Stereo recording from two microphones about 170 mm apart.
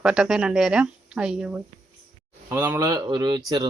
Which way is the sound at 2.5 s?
15° right (ahead or behind).